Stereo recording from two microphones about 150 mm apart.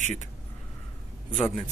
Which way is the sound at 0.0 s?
55° right (ahead or behind).